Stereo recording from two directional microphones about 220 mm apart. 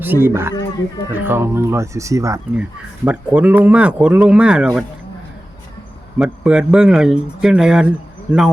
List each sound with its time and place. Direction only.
0.0 s speech: 10° right (ahead or behind)
6.1 s speech: 5° right (ahead or behind)